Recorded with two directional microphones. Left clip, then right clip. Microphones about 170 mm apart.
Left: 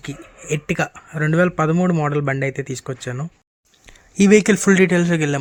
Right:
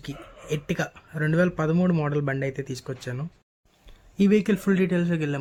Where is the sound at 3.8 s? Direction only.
50° left (ahead or behind).